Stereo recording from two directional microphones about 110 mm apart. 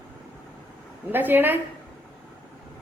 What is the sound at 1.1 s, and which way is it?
Speech, 20° right (ahead or behind).